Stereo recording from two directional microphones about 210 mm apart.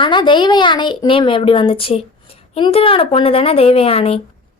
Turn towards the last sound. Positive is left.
turn(degrees=30)  # may be behind; listen again after turning